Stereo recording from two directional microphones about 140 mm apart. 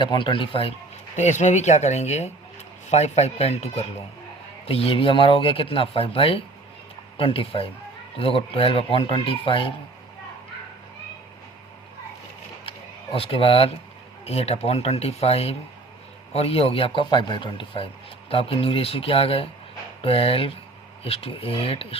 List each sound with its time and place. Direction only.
0.0 s speech: 35° left (ahead or behind)
1.1 s speech: 60° left (ahead or behind); by 9.7 s 40° left (ahead or behind)
13.1 s speech: 40° left (ahead or behind)